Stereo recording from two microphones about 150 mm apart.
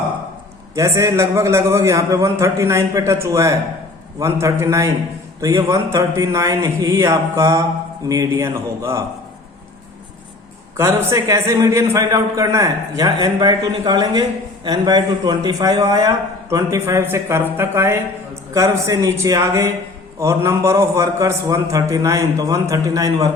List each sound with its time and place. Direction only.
0.8 s a man's voice: 20° right (ahead or behind)
10.8 s a man's voice: 20° right (ahead or behind)